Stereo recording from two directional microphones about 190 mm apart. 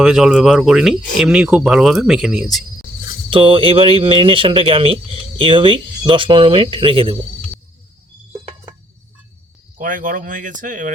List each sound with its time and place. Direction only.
0.0 s speech: centre (ahead or behind)
3.2 s speech: 25° right (ahead or behind)
9.7 s speech: 45° right (ahead or behind)